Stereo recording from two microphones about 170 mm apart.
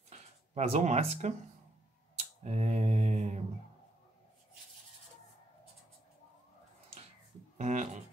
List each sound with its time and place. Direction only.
0.6 s speech: 40° right (ahead or behind)
2.4 s mantra: 40° right (ahead or behind)
7.5 s speech: 40° right (ahead or behind)